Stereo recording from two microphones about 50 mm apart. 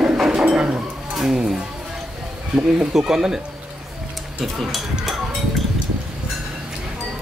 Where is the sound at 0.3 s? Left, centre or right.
Centre.